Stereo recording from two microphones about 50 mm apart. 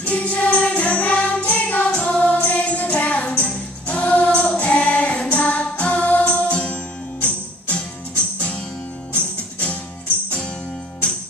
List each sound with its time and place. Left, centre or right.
0.0 s jingle bell: left
7.6 s music: left